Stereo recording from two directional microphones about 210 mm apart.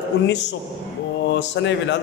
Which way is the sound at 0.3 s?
55° left (ahead or behind).